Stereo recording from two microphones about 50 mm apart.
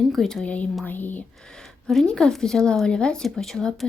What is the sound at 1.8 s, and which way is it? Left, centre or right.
Speech, centre.